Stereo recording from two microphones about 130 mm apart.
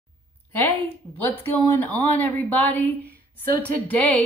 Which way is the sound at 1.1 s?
15° left (ahead or behind).